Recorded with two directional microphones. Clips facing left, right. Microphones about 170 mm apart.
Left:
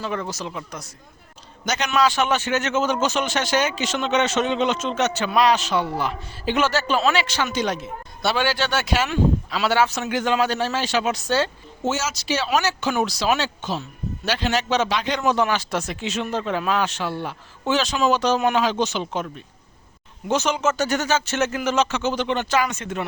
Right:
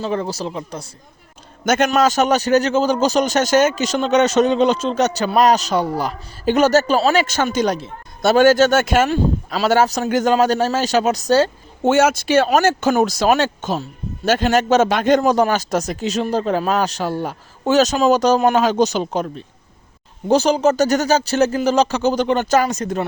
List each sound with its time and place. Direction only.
0.0 s a man's voice: 30° right (ahead or behind)
1.6 s a man's voice: 50° right (ahead or behind)
9.0 s a man's voice: 35° right (ahead or behind)
11.8 s a man's voice: 60° right (ahead or behind); by 23.0 s 40° right (ahead or behind)